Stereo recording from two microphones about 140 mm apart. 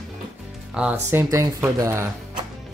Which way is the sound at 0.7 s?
5° right (ahead or behind).